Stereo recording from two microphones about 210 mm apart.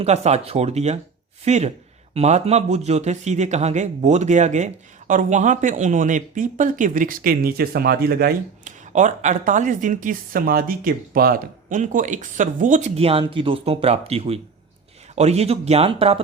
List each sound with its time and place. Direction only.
0.0 s a man's voice: 30° right (ahead or behind)